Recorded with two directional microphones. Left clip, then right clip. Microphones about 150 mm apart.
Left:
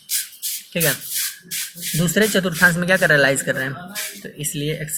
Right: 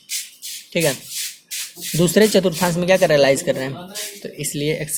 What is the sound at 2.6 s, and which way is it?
Speech, 20° right (ahead or behind).